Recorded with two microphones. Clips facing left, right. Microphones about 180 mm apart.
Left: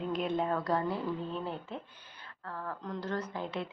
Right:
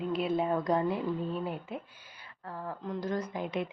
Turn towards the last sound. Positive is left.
turn(degrees=-15)  # may be behind; listen again after turning